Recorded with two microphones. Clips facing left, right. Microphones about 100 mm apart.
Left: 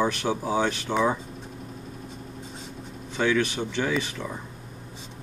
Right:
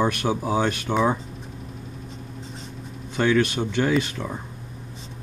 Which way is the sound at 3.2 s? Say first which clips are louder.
Right 3 dB; 15° right (ahead or behind).